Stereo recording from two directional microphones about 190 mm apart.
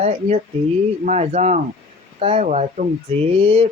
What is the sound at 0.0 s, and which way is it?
Speech, 35° right (ahead or behind).